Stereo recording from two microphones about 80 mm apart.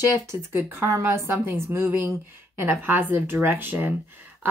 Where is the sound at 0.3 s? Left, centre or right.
Right.